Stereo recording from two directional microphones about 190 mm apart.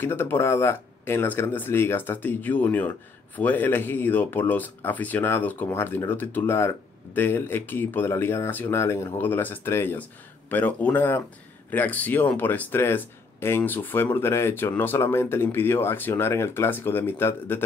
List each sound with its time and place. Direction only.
0.0 s speech: 10° left (ahead or behind)